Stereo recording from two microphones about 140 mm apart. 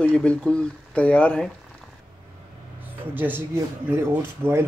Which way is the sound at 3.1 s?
15° right (ahead or behind).